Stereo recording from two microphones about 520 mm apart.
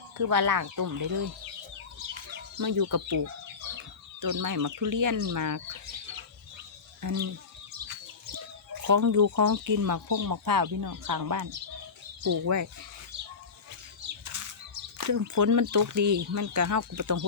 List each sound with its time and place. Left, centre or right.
0.2 s speech: right
2.6 s speech: right
7.0 s speech: right
14.3 s bird flight: right
14.9 s speech: right